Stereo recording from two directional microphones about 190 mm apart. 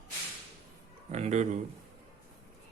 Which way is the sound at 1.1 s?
35° right (ahead or behind).